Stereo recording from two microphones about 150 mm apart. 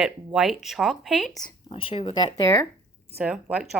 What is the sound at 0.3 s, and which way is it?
A woman's voice, centre (ahead or behind).